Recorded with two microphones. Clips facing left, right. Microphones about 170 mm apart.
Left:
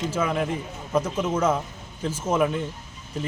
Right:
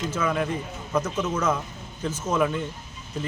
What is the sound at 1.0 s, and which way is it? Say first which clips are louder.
A man's voice: left 3 dB; 30° left (ahead or behind).